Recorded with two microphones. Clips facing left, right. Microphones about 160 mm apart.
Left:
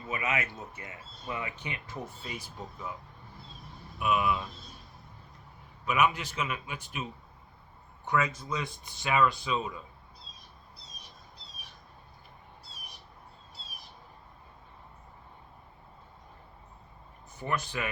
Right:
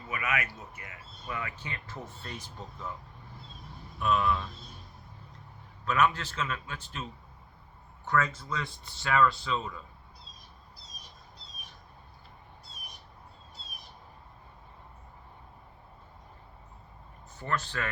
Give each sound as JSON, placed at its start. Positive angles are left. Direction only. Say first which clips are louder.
{"t": 0.1, "sound": "speech", "louder": "left 1 dB", "side_deg": 25}
{"t": 4.0, "sound": "speech", "louder": "even", "side_deg": 10}
{"t": 5.8, "sound": "speech", "louder": "even", "side_deg": 10}
{"t": 17.4, "sound": "speech", "louder": "even", "side_deg": 15}